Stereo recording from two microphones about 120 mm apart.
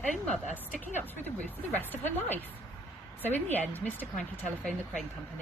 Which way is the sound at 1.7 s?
15° left (ahead or behind).